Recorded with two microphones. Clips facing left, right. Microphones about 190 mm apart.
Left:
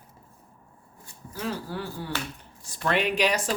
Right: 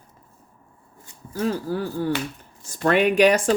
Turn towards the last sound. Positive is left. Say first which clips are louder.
# right 8 dB
turn(degrees=-50)  # may be behind; listen again after turning